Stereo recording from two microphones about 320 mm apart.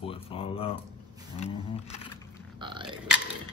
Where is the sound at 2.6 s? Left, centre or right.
Centre.